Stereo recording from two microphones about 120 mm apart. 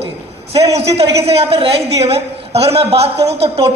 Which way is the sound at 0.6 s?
60° right (ahead or behind).